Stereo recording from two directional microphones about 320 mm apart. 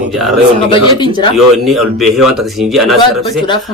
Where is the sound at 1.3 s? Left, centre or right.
Centre.